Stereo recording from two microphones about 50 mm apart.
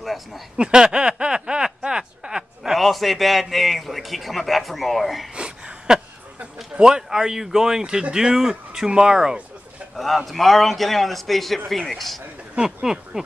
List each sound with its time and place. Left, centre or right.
0.0 s speech: centre
0.6 s a sound: centre
2.7 s a man's voice: centre
5.3 s a sound: centre
6.4 s speech: centre
9.9 s a man's voice: centre
12.5 s speech: centre